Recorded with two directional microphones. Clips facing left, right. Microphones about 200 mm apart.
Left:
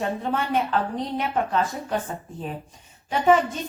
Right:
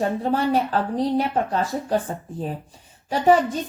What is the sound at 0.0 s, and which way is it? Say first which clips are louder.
A woman's voice: right 4 dB; 35° right (ahead or behind).